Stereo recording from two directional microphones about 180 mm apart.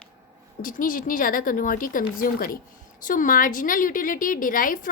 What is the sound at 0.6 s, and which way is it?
A woman's voice, 50° left (ahead or behind).